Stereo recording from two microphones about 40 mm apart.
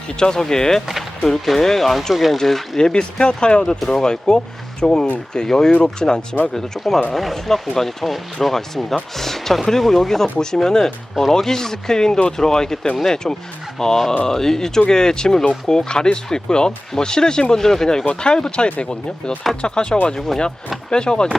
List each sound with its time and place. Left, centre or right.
0.2 s speech: centre
2.7 s speech: centre
6.8 s speech: centre
18.0 s speech: left
20.1 s speech: centre